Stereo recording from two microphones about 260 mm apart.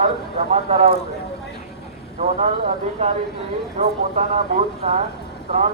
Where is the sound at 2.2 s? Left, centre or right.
Right.